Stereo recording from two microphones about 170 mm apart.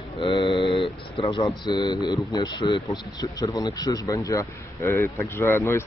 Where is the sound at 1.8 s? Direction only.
40° right (ahead or behind).